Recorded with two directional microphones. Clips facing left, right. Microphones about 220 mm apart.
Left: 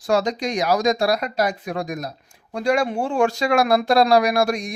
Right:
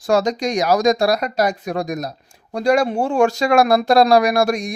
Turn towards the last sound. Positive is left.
turn(degrees=-45)  # may be behind; listen again after turning